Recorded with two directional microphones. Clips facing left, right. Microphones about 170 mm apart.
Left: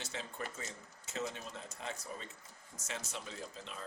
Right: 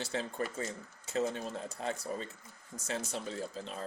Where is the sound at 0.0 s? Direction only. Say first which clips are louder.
Right 8 dB; 35° right (ahead or behind).